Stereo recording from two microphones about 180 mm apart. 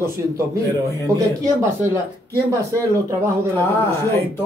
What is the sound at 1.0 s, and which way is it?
Speech, 20° right (ahead or behind).